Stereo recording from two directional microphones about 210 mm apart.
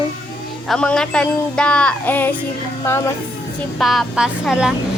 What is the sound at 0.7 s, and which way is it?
Speech, 5° left (ahead or behind).